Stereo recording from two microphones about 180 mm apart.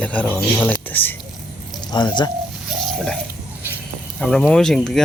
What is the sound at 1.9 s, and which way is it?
Speech, 25° left (ahead or behind).